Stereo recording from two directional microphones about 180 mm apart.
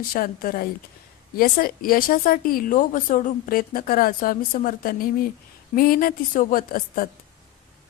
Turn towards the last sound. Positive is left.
turn(degrees=50)  # may be behind; listen again after turning